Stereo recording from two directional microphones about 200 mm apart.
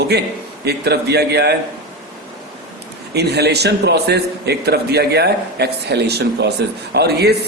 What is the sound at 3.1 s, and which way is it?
A man's voice, 55° right (ahead or behind).